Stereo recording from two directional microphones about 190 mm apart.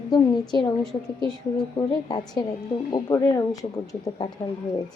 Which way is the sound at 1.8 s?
20° left (ahead or behind).